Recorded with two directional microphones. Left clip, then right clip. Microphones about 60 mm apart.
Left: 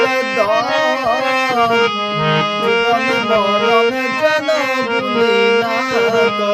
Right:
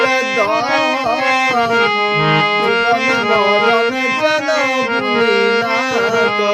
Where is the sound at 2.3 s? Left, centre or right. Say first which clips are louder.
Right 2 dB; centre.